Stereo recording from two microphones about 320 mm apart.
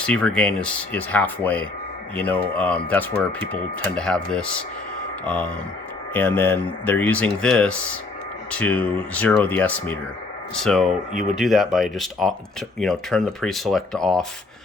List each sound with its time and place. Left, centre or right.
0.0 s speech: centre
11.1 s speech: right
11.3 s speech: centre